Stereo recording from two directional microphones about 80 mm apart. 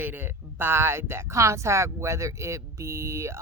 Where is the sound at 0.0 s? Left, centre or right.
Right.